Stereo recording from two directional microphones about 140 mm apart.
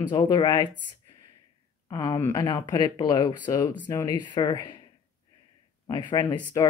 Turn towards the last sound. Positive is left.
turn(degrees=30)  # may be behind; listen again after turning